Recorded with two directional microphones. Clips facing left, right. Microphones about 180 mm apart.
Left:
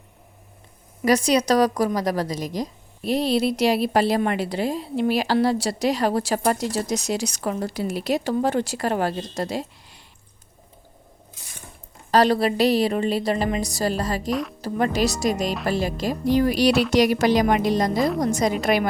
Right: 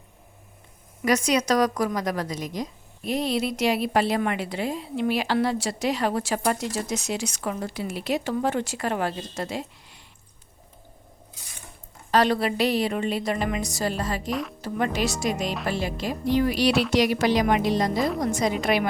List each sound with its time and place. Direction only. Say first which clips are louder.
1.0 s a woman's voice: left 3 dB; 35° left (ahead or behind)
12.1 s a woman's voice: left 3 dB; 35° left (ahead or behind)
14.3 s speech: left 3 dB; centre (ahead or behind)
14.6 s a woman's voice: left 4 dB; 35° left (ahead or behind)